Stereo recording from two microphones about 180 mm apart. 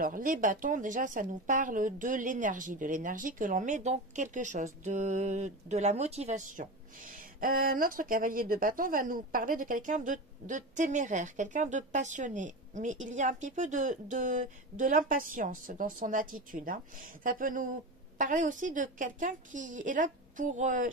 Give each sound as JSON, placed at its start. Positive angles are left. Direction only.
{"t": 0.0, "sound": "speech", "side_deg": -50}